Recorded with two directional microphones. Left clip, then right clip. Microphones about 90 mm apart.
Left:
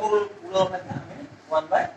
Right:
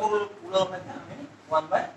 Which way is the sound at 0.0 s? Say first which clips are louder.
Left 3 dB; 30° left (ahead or behind).